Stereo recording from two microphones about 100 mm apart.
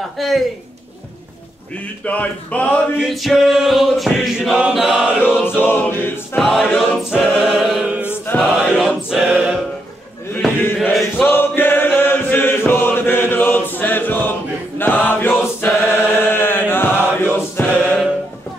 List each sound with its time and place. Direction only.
0.2 s choir: centre (ahead or behind)
2.0 s speech: 15° left (ahead or behind)
3.0 s choir: centre (ahead or behind)
5.2 s choir: 20° left (ahead or behind)
6.3 s choir: centre (ahead or behind)
8.3 s chant: 20° left (ahead or behind)
8.6 s choir: 5° right (ahead or behind)
10.8 s chant: centre (ahead or behind)
11.1 s chant: 20° left (ahead or behind)
17.6 s music: 15° left (ahead or behind)